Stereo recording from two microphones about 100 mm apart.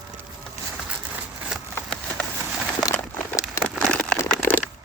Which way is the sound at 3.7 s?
5° left (ahead or behind).